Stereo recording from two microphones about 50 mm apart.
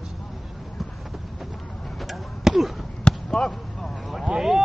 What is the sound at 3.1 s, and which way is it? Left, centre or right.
Basketball bounce, left.